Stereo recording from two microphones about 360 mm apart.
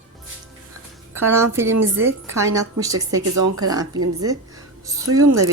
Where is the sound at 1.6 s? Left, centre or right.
Right.